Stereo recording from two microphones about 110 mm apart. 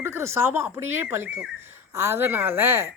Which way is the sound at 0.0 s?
25° right (ahead or behind).